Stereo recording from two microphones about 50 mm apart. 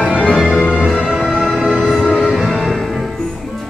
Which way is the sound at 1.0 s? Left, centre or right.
Centre.